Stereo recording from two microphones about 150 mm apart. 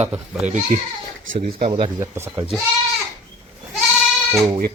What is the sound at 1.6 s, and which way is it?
Speech, 40° right (ahead or behind).